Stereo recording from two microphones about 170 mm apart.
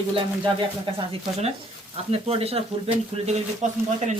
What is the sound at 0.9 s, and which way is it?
Speech, 40° right (ahead or behind).